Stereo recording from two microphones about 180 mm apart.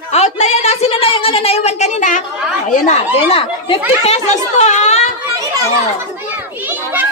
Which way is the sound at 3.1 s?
30° left (ahead or behind).